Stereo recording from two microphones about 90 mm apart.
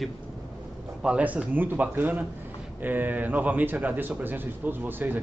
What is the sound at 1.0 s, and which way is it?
A man's voice, 15° right (ahead or behind).